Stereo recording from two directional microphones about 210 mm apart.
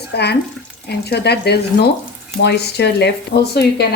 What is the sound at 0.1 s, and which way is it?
A woman's voice, 50° left (ahead or behind).